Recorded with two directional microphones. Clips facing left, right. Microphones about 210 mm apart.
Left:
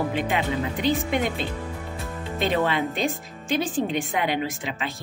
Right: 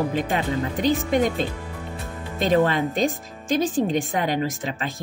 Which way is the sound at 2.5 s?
45° right (ahead or behind).